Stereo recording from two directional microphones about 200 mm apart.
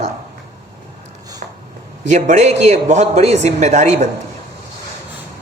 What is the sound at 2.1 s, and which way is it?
Speech, 35° right (ahead or behind).